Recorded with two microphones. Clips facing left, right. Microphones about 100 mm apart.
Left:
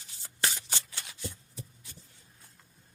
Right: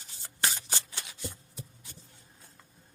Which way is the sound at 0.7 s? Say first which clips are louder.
Right 2 dB; 25° right (ahead or behind).